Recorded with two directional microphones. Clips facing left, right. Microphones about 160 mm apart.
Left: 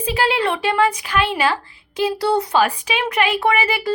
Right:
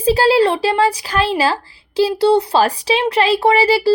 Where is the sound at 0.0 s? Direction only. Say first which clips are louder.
Right 7 dB; 35° right (ahead or behind).